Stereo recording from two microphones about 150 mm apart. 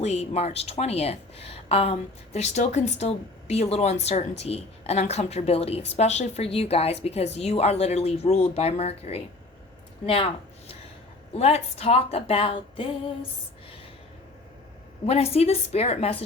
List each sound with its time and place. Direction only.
0.0 s speech: 45° left (ahead or behind)
11.3 s a woman's voice: 45° left (ahead or behind)
15.0 s speech: 40° left (ahead or behind)